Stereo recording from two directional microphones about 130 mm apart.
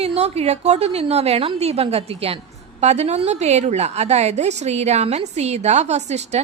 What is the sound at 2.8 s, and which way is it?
A woman's voice, 60° right (ahead or behind).